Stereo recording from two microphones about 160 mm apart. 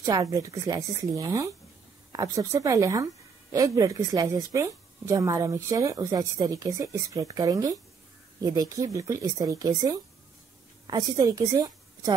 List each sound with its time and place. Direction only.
0.0 s a woman's voice: 20° right (ahead or behind)